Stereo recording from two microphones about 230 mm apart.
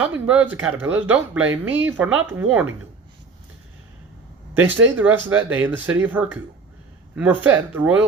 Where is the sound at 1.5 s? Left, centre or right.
Right.